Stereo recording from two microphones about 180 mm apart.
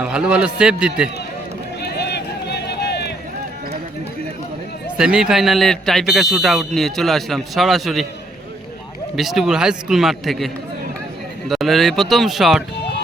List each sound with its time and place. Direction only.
0.0 s speech: 5° right (ahead or behind)
1.8 s run: 65° left (ahead or behind)
4.9 s speech: 5° right (ahead or behind)
9.1 s speech: centre (ahead or behind)